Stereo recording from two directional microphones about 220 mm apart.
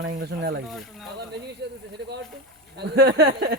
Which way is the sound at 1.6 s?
50° right (ahead or behind).